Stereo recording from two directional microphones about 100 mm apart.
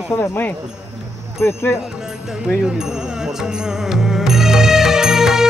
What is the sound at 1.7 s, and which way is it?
Speech, 5° right (ahead or behind).